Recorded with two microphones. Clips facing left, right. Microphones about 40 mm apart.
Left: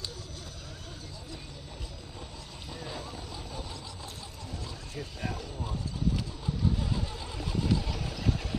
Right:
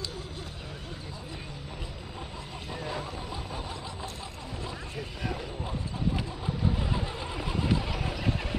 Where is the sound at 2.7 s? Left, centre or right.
Right.